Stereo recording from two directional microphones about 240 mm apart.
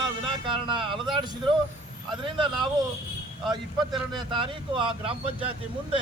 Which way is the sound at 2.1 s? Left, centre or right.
Centre.